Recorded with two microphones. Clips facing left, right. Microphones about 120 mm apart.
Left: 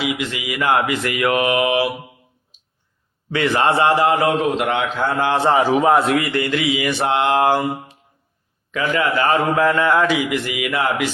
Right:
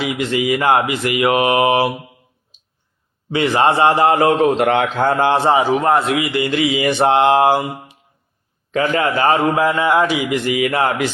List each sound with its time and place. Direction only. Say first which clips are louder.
0.0 s speech: right 5 dB; 35° right (ahead or behind)
1.0 s mantra: right 3 dB; 20° right (ahead or behind); by 1.9 s 35° right (ahead or behind)
3.2 s mantra: right 2 dB; 20° right (ahead or behind)
3.8 s speech: right 2 dB; 35° right (ahead or behind)
5.6 s a man's voice: even; centre (ahead or behind)
6.2 s mantra: right 2 dB; 15° right (ahead or behind)
8.7 s speech: right 2 dB; 35° right (ahead or behind)
9.3 s mantra: right 1 dB; 15° right (ahead or behind)
10.2 s speech: right 5 dB; 30° right (ahead or behind)